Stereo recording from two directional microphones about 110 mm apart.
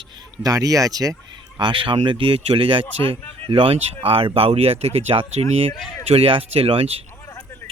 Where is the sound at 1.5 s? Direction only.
50° right (ahead or behind).